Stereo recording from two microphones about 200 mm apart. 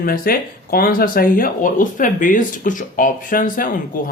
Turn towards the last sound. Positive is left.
turn(degrees=45)  # may be behind; listen again after turning